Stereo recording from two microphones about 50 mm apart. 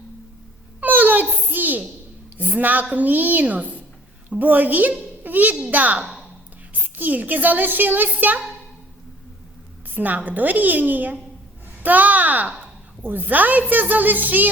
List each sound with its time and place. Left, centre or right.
0.8 s a sound: right
2.5 s a child's voice: right
9.9 s a child's voice: right